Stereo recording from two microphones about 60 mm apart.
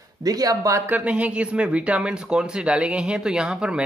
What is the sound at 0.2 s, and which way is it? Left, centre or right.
Speech, right.